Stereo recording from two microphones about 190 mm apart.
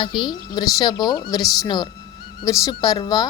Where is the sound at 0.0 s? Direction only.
25° left (ahead or behind).